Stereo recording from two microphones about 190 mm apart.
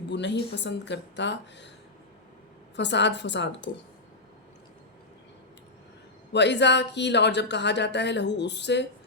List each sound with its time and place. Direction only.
0.1 s speech: 65° left (ahead or behind)
2.7 s speech: 65° left (ahead or behind)
6.3 s speech: 65° left (ahead or behind)